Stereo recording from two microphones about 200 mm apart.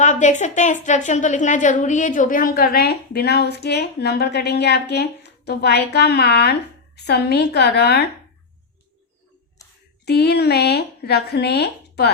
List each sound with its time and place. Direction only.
0.0 s a woman's voice: 35° left (ahead or behind); by 8.0 s 55° left (ahead or behind)
9.6 s a sound: 15° left (ahead or behind)
10.1 s speech: 55° left (ahead or behind)